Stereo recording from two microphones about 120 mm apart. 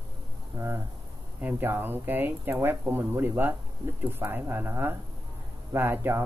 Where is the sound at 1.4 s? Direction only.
20° right (ahead or behind).